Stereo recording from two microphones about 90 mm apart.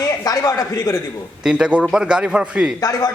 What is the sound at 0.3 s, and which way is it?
Speech, 40° left (ahead or behind).